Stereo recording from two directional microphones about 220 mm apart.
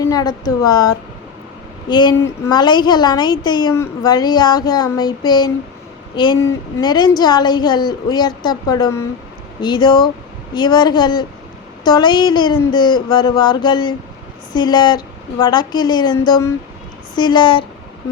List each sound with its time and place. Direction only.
0.1 s a woman's voice: 15° left (ahead or behind)